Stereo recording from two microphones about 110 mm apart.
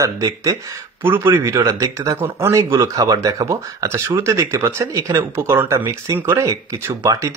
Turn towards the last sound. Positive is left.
turn(degrees=-35)  # may be behind; listen again after turning